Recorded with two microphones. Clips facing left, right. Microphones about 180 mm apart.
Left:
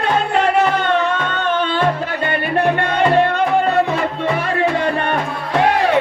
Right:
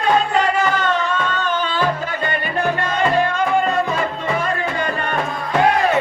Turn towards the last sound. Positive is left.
turn(degrees=70)  # may be behind; listen again after turning